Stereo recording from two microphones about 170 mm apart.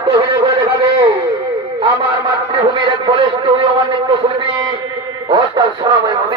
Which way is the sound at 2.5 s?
30° right (ahead or behind).